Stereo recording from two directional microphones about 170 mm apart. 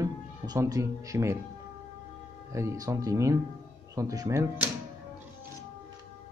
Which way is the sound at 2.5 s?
15° right (ahead or behind).